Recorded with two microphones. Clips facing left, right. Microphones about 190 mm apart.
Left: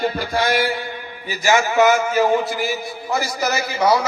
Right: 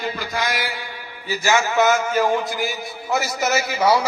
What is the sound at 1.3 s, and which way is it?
A man's voice, 15° left (ahead or behind).